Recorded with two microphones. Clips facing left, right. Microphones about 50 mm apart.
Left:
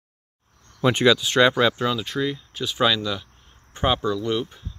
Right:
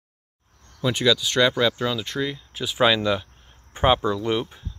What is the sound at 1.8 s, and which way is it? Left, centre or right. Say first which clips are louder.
Speech: left 1 dB; centre.